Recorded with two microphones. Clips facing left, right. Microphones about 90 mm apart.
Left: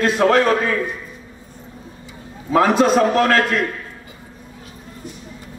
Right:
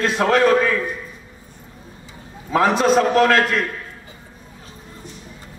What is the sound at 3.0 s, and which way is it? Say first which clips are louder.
Speech: even; 40° left (ahead or behind).